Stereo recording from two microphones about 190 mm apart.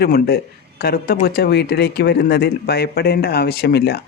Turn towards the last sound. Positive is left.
turn(degrees=60)  # may be behind; listen again after turning